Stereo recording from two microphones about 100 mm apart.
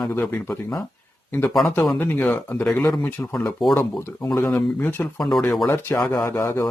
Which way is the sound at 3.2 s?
30° left (ahead or behind).